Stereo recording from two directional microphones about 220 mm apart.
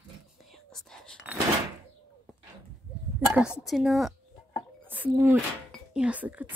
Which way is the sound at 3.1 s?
5° right (ahead or behind).